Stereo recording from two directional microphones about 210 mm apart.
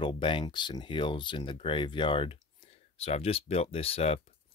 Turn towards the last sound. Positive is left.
turn(degrees=30)  # may be behind; listen again after turning